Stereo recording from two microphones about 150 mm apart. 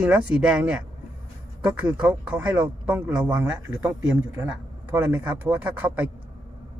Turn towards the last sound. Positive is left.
turn(degrees=-10)  # may be behind; listen again after turning